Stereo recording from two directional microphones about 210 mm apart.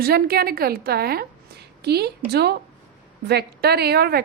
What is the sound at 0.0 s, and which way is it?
A woman's voice, 45° right (ahead or behind).